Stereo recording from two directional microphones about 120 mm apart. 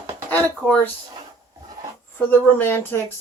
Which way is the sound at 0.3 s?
15° left (ahead or behind).